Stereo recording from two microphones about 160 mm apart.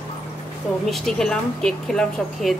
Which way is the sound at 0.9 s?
5° left (ahead or behind).